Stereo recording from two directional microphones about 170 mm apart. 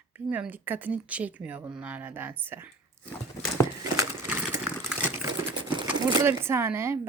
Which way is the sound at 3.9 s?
15° right (ahead or behind).